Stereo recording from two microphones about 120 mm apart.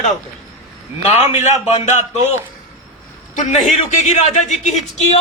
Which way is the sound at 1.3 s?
70° left (ahead or behind).